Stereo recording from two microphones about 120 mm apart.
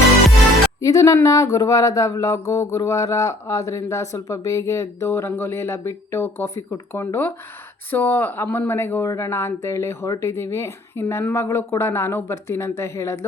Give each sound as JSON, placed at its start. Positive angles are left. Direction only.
{"t": 0.8, "sound": "speech", "side_deg": 30}